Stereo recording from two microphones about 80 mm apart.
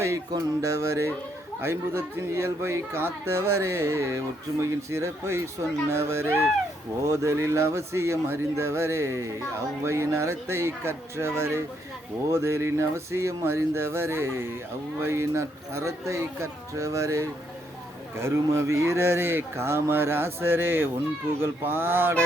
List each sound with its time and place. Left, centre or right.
0.3 s speech: right